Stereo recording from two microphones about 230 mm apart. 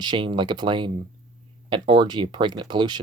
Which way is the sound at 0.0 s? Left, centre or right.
Centre.